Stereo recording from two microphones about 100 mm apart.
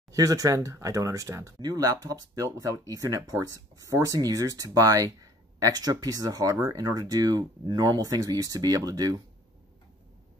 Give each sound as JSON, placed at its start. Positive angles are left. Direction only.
{"t": 0.1, "sound": "speech", "side_deg": -35}